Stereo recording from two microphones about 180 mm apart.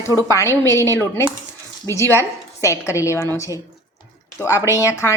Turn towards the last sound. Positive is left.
turn(degrees=15)  # may be behind; listen again after turning